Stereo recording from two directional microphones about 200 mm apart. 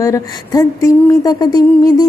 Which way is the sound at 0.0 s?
15° left (ahead or behind).